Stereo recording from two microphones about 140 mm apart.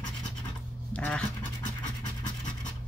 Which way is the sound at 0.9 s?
10° left (ahead or behind).